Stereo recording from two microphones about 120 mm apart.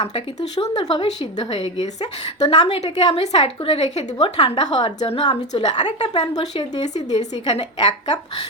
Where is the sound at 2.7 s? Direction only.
60° left (ahead or behind).